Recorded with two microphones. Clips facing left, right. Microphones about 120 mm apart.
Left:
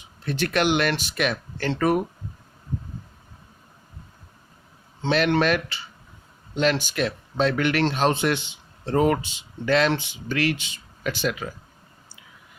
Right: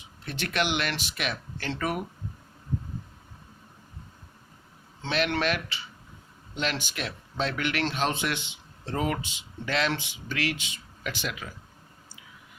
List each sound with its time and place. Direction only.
0.3 s speech: 45° left (ahead or behind)
5.4 s speech: 45° left (ahead or behind)